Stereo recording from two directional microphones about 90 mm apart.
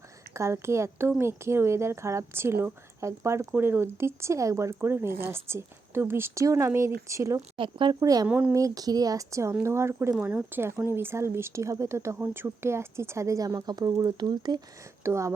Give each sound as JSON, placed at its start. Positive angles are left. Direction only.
{"t": 0.3, "sound": "speech", "side_deg": -30}
{"t": 7.5, "sound": "speech", "side_deg": -70}
{"t": 7.9, "sound": "speech", "side_deg": -45}
{"t": 8.3, "sound": "speech", "side_deg": -15}
{"t": 8.5, "sound": "speech", "side_deg": -40}
{"t": 10.2, "sound": "speech", "side_deg": -20}
{"t": 15.0, "sound": "speech", "side_deg": -35}